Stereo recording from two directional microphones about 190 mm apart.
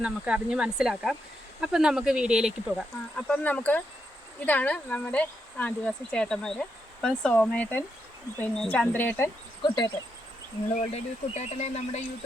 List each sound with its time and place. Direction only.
0.0 s speech: 5° right (ahead or behind); by 9.3 s 10° left (ahead or behind)
9.6 s speech: 25° left (ahead or behind)
10.8 s speech: 35° left (ahead or behind)